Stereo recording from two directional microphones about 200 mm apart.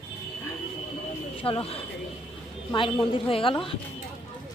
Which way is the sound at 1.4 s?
25° left (ahead or behind).